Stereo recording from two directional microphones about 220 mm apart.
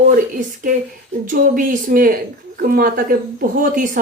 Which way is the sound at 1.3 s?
35° right (ahead or behind).